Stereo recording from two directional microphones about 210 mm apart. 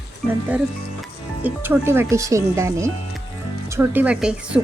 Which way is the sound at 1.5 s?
10° right (ahead or behind).